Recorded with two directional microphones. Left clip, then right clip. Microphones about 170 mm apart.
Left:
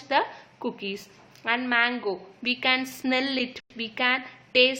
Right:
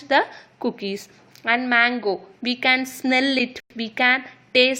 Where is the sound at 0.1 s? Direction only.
30° right (ahead or behind).